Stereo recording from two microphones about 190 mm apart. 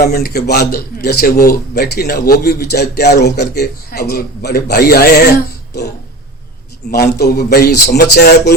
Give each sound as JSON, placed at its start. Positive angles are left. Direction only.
{"t": 0.0, "sound": "a man's voice", "side_deg": 55}
{"t": 6.9, "sound": "a man's voice", "side_deg": 55}